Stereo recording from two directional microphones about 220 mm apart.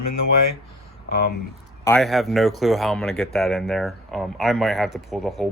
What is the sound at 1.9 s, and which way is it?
Speech, centre (ahead or behind).